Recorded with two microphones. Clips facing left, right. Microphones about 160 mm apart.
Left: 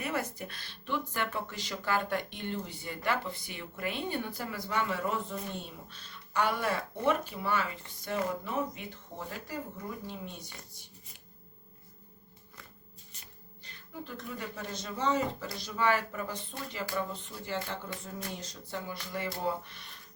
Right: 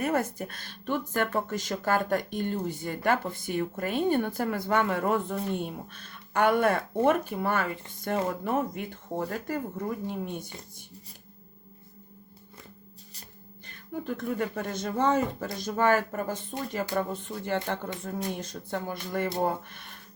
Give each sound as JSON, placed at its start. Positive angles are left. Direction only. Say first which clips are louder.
{"t": 0.0, "sound": "speech", "louder": "right 7 dB", "side_deg": -50}
{"t": 13.7, "sound": "speech", "louder": "right 9 dB", "side_deg": -55}